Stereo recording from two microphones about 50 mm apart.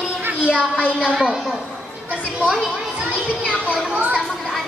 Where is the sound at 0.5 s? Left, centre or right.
Centre.